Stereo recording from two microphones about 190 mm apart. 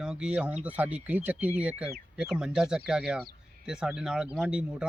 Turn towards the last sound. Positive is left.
turn(degrees=-5)  # may be behind; listen again after turning